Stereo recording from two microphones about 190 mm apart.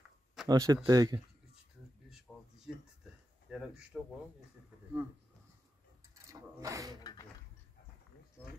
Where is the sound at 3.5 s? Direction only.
5° right (ahead or behind).